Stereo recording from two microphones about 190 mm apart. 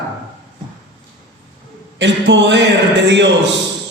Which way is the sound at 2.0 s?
70° right (ahead or behind).